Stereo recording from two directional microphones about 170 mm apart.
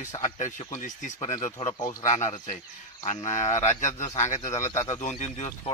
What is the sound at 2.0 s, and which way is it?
Speech, 45° left (ahead or behind).